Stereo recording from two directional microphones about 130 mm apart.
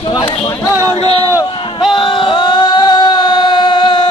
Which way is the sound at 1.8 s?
40° left (ahead or behind).